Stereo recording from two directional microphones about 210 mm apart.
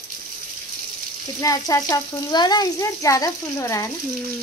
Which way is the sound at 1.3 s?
15° left (ahead or behind).